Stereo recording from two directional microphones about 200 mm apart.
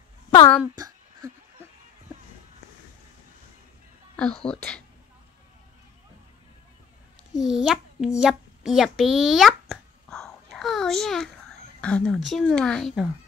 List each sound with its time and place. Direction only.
0.3 s speech: 20° left (ahead or behind)
0.7 s a sound: 20° right (ahead or behind)
4.5 s speech: 5° left (ahead or behind)
7.3 s a child's voice: centre (ahead or behind)